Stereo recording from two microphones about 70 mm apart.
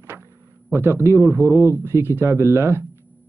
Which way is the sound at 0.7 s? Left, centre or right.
Right.